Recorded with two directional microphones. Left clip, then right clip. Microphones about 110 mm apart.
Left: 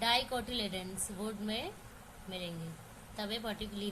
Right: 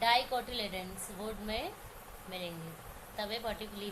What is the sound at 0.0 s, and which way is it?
A woman's voice, 60° left (ahead or behind).